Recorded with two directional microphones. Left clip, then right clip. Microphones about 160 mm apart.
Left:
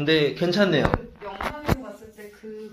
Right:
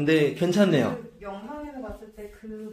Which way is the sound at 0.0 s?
15° right (ahead or behind).